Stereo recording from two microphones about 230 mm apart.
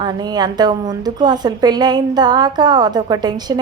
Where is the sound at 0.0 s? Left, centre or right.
Centre.